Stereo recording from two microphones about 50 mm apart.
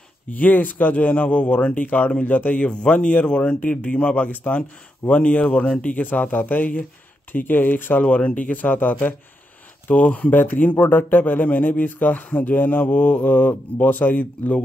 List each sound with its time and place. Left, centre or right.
0.3 s speech: left
8.0 s speech: left